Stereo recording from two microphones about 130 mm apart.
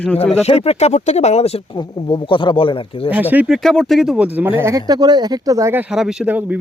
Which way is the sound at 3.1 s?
10° right (ahead or behind).